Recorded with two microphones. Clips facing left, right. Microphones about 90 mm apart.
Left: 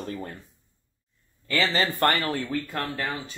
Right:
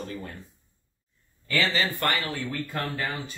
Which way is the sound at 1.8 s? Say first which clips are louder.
Left 3 dB; 40° left (ahead or behind).